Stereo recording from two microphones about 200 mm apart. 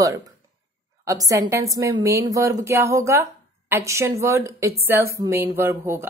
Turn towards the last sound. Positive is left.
turn(degrees=-10)  # may be behind; listen again after turning